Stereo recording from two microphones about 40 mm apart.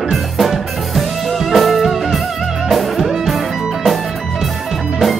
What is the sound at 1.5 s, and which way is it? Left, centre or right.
Music, centre.